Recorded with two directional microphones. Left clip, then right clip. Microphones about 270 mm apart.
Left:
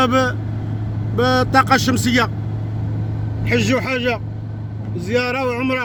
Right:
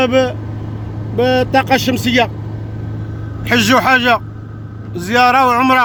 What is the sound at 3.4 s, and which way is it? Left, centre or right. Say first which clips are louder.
Speech: right 7 dB; right.